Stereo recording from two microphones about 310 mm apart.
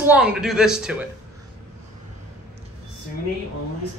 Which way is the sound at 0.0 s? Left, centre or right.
Centre.